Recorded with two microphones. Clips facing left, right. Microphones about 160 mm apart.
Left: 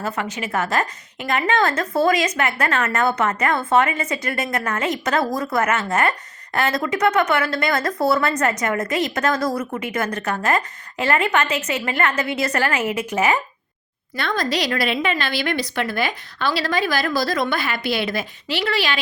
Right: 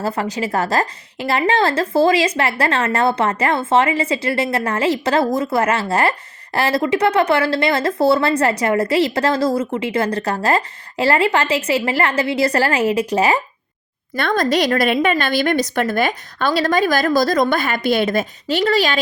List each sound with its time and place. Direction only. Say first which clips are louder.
0.0 s speech: right 5 dB; 35° right (ahead or behind)
14.2 s a woman's voice: right 6 dB; 50° right (ahead or behind)